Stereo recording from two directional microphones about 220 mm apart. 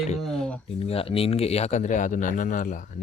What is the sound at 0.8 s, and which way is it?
Speech, 25° left (ahead or behind).